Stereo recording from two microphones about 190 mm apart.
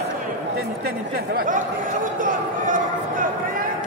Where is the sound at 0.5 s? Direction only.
55° right (ahead or behind).